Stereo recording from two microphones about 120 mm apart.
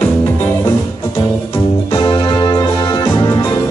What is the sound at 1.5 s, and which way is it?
Music, 30° left (ahead or behind).